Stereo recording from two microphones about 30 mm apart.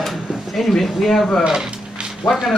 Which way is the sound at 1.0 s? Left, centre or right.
Centre.